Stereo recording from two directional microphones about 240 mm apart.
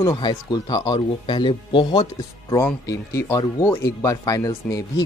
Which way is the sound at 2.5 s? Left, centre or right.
Centre.